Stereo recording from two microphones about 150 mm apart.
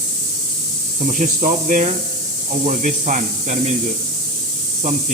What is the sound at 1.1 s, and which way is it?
Speech, 60° right (ahead or behind).